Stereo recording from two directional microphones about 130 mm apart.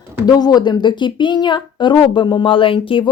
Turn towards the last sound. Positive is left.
turn(degrees=40)  # may be behind; listen again after turning